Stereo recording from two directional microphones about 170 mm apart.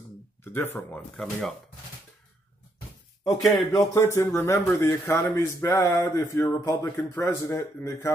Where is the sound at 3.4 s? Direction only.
Centre (ahead or behind).